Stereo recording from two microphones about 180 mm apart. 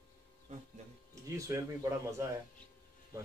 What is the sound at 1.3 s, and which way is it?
Speech, 15° right (ahead or behind).